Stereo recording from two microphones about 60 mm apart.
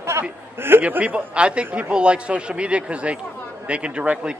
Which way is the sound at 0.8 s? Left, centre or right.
Right.